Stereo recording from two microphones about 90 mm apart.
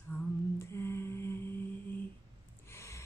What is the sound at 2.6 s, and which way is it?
Gasp, 30° left (ahead or behind).